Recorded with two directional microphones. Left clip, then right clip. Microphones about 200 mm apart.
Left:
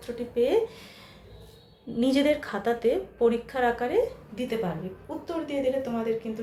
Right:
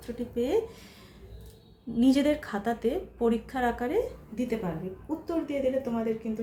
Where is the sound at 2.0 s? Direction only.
15° right (ahead or behind).